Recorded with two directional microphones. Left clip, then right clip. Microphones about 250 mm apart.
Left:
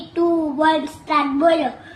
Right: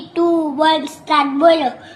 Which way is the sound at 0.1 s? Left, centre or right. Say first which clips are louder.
Right 3 dB; centre.